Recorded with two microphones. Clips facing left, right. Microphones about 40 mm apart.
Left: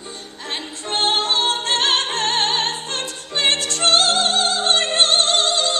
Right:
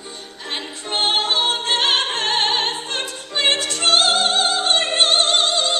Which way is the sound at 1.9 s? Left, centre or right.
Right.